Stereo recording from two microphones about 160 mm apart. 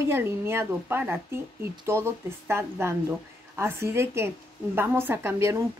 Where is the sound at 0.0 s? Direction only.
15° right (ahead or behind).